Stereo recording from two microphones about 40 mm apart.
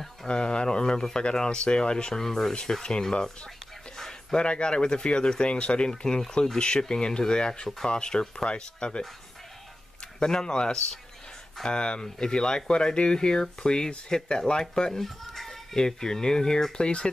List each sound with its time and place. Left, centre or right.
0.3 s speech: left
10.2 s speech: centre
15.7 s speech: centre